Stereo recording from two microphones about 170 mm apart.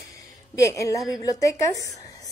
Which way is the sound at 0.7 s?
20° left (ahead or behind).